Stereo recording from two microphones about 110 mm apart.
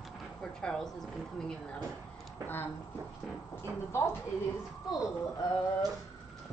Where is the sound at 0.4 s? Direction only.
5° left (ahead or behind).